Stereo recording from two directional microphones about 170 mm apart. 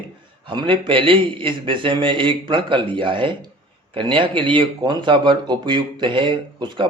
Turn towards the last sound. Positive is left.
turn(degrees=-30)  # may be behind; listen again after turning